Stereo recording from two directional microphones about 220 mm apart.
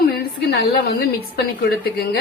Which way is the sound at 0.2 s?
45° left (ahead or behind).